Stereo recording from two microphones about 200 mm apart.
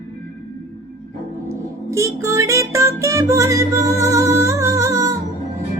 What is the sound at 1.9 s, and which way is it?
Music, 15° right (ahead or behind).